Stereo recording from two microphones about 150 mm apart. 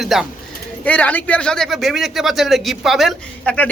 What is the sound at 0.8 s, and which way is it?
A man's voice, 10° left (ahead or behind).